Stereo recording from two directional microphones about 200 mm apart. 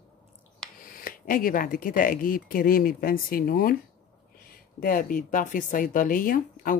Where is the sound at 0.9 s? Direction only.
45° left (ahead or behind).